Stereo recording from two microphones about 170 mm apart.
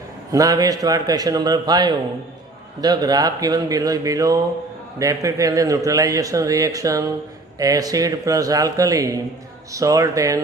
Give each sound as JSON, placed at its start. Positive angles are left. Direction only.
{"t": 0.3, "sound": "a man's voice", "side_deg": -20}